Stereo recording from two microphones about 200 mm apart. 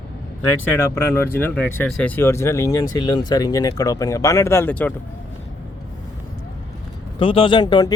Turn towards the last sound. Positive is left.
turn(degrees=20)  # may be behind; listen again after turning